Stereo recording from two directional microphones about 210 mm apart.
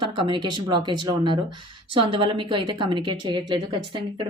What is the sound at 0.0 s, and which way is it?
Speech, 25° right (ahead or behind).